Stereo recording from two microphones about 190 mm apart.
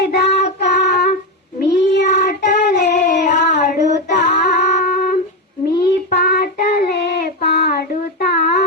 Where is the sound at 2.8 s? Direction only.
40° left (ahead or behind).